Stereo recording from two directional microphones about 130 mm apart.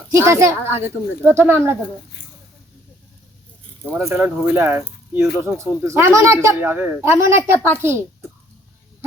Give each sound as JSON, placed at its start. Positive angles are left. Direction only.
{"t": 0.1, "sound": "speech", "side_deg": -20}
{"t": 4.0, "sound": "speech", "side_deg": -20}